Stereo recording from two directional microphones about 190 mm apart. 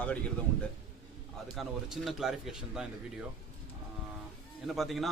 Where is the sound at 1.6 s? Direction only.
Centre (ahead or behind).